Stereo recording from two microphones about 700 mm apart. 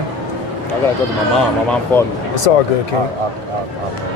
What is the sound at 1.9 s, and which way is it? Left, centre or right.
Speech, centre.